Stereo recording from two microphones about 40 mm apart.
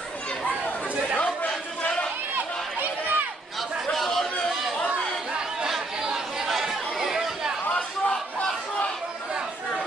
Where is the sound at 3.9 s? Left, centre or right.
Centre.